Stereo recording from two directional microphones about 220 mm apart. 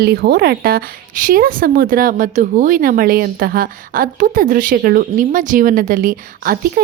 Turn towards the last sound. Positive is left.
turn(degrees=-40)  # may be behind; listen again after turning